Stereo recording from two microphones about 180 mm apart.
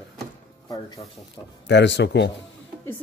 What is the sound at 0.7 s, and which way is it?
Speech, 20° left (ahead or behind).